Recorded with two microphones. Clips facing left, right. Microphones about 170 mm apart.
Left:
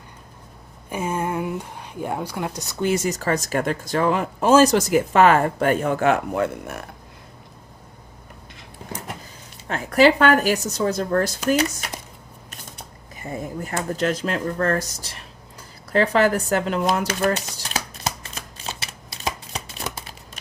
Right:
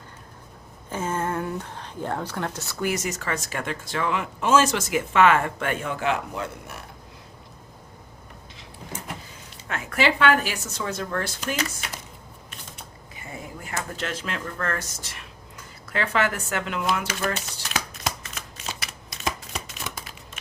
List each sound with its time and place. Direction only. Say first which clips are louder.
0.9 s a woman's voice: left 2 dB; 15° left (ahead or behind); by 6.8 s 55° left (ahead or behind)
9.6 s a woman's voice: left 8 dB; 35° left (ahead or behind)
13.2 s a woman's voice: left 8 dB; 40° left (ahead or behind)
15.9 s shuffling cards: left 7 dB; 35° left (ahead or behind)